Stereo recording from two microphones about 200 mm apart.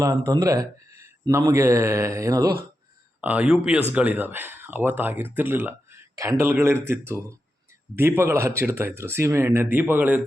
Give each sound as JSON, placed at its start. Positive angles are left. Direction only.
{"t": 0.0, "sound": "speech", "side_deg": -15}